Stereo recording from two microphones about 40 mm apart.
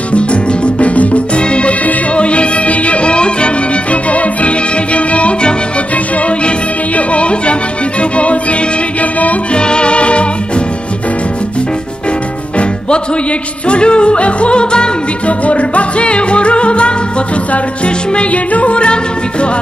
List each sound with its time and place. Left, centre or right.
0.1 s music: left
7.0 s music: left
9.6 s music: left
13.7 s music: left
15.4 s music: left